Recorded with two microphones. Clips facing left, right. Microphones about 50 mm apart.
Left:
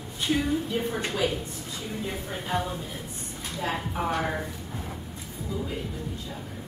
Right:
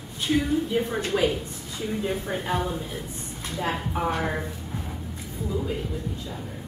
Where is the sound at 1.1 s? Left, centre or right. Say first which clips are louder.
Right 5 dB; right.